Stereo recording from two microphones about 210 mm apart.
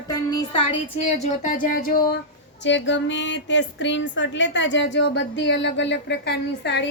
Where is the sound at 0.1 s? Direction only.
20° left (ahead or behind).